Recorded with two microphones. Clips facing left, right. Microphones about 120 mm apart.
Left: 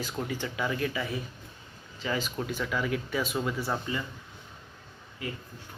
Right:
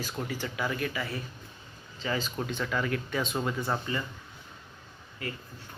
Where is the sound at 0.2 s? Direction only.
15° left (ahead or behind).